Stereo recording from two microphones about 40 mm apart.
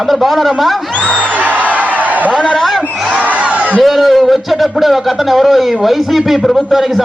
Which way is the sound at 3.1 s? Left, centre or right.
Right.